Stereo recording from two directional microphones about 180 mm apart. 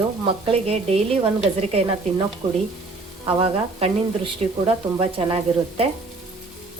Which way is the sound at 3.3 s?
30° right (ahead or behind).